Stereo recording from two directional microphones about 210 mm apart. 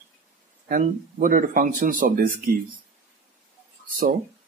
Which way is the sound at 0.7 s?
40° right (ahead or behind).